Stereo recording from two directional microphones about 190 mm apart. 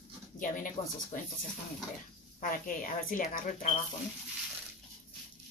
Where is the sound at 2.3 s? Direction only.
45° left (ahead or behind).